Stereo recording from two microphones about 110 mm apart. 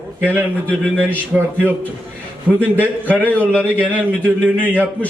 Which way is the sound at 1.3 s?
5° right (ahead or behind).